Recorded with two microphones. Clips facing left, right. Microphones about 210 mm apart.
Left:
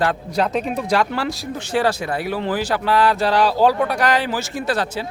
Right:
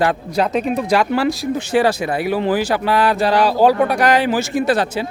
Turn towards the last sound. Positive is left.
turn(degrees=-20)  # may be behind; listen again after turning